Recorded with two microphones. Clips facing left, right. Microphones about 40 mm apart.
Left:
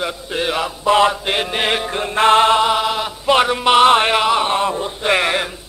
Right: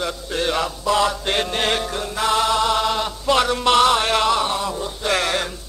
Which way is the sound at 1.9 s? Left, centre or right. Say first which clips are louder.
Left 7 dB; left.